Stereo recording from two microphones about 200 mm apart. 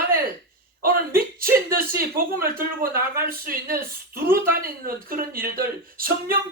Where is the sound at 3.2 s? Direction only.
45° right (ahead or behind).